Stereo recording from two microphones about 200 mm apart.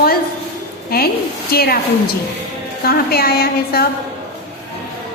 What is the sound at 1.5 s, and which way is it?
Speech, 50° left (ahead or behind).